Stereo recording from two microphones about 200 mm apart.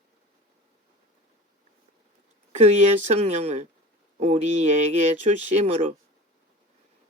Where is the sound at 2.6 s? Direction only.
35° right (ahead or behind).